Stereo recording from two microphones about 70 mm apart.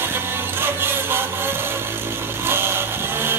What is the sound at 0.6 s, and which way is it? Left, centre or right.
Music, right.